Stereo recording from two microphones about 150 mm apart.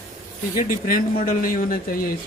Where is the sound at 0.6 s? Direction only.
70° left (ahead or behind).